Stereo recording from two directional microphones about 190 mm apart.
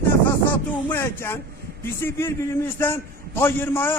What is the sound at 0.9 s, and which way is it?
A man's voice, 10° left (ahead or behind).